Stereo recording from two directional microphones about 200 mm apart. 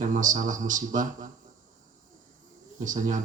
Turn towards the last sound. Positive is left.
turn(degrees=-40)  # may be behind; listen again after turning